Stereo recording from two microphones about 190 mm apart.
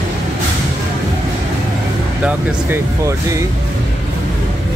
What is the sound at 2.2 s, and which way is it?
Speech, 10° right (ahead or behind).